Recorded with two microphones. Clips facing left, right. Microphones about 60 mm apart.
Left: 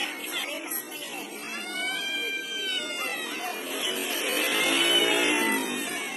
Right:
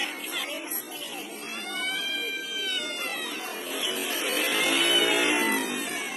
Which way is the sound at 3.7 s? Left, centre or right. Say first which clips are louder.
Right 3 dB; centre.